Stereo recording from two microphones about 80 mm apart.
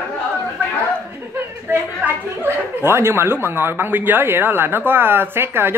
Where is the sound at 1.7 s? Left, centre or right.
Right.